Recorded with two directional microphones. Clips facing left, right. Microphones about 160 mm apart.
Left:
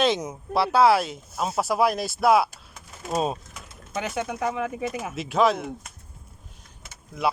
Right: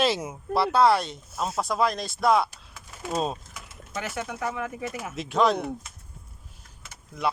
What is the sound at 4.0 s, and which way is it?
Speech, 20° left (ahead or behind).